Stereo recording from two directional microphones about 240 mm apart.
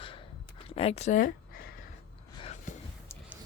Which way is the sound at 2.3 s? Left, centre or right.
Left.